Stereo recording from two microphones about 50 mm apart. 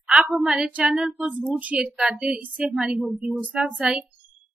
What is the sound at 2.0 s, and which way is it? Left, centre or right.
Speech, centre.